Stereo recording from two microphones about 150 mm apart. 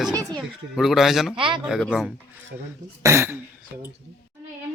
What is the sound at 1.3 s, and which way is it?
Speech, 35° right (ahead or behind).